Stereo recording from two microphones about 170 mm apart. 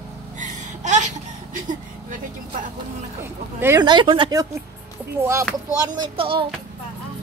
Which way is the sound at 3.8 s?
25° right (ahead or behind).